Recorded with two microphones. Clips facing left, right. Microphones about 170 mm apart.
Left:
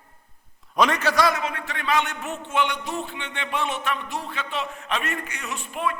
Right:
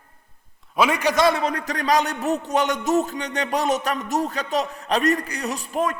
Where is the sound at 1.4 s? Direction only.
40° right (ahead or behind).